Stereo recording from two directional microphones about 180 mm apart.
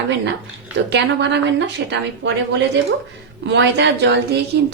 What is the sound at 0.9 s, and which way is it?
Speech, 75° right (ahead or behind).